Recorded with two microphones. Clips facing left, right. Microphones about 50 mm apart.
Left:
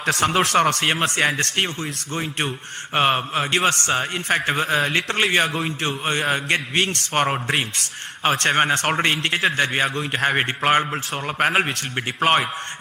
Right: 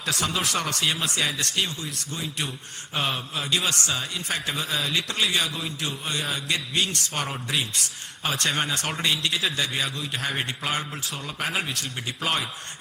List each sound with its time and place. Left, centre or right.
0.0 s a man's voice: left
5.5 s a man's voice: left
6.1 s a man's voice: left